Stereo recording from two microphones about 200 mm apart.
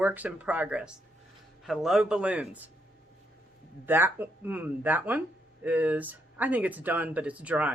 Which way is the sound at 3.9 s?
10° right (ahead or behind).